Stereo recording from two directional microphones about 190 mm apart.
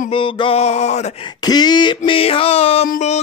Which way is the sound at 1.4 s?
20° left (ahead or behind).